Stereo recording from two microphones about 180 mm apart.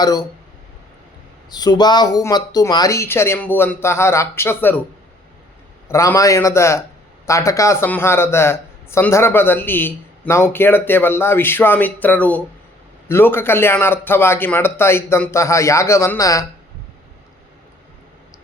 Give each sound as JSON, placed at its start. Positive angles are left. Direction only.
{"t": 0.0, "sound": "speech", "side_deg": 20}
{"t": 1.5, "sound": "a man's voice", "side_deg": 20}
{"t": 5.9, "sound": "a man's voice", "side_deg": 15}